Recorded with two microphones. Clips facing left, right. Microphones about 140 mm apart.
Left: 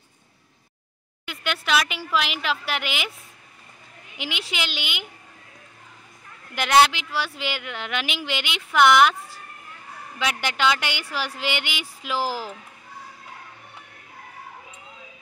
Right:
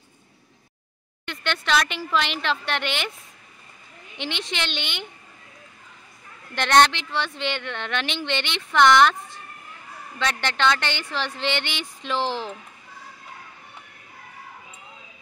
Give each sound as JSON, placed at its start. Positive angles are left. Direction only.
{"t": 1.2, "sound": "speech", "side_deg": 5}
{"t": 4.2, "sound": "speech", "side_deg": 5}
{"t": 6.5, "sound": "speech", "side_deg": 5}